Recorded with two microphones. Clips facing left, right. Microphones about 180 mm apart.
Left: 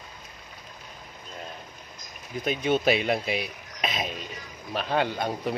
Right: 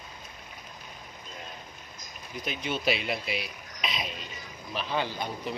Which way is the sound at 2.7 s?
50° left (ahead or behind).